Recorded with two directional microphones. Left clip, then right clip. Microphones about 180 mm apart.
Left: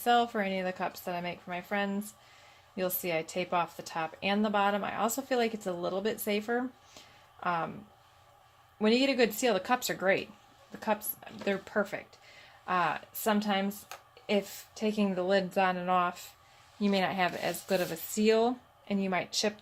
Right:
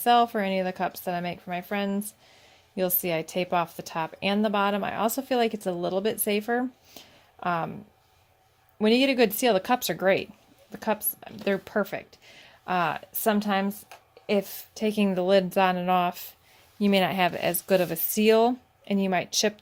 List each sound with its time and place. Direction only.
0.0 s speech: 60° right (ahead or behind)
8.8 s speech: 60° right (ahead or behind)